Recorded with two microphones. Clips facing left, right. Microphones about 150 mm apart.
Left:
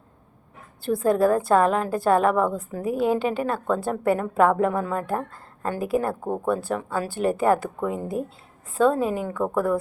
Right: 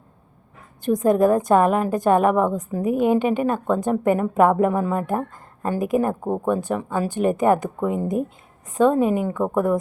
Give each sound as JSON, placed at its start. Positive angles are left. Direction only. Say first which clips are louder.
{"t": 0.9, "sound": "a woman's voice", "louder": "right 3 dB", "side_deg": -15}
{"t": 9.3, "sound": "a woman's voice", "louder": "right 3 dB", "side_deg": -15}